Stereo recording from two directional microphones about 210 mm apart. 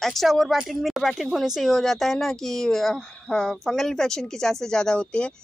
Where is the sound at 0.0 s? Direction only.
Centre (ahead or behind).